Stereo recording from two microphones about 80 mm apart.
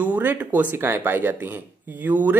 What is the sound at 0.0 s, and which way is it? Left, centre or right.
Speech, right.